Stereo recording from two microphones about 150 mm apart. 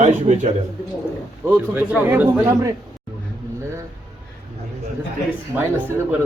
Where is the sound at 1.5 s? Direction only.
10° right (ahead or behind).